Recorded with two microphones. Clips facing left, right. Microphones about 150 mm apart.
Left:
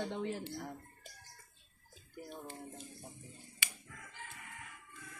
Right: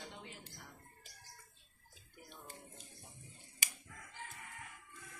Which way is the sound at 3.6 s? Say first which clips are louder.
Left 1 dB; 40° right (ahead or behind).